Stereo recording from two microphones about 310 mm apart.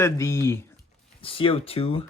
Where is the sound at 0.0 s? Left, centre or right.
Centre.